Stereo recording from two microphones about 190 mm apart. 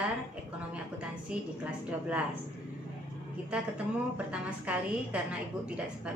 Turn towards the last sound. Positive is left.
turn(degrees=-5)  # may be behind; listen again after turning